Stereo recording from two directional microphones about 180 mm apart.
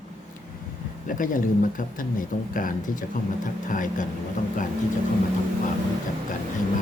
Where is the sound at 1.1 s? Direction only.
50° left (ahead or behind).